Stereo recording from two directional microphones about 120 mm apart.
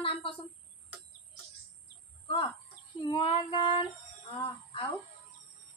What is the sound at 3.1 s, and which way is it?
Speech, 45° left (ahead or behind).